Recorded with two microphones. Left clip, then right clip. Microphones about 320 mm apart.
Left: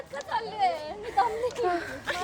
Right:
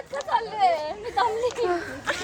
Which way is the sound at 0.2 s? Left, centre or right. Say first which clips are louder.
Right 5 dB; centre.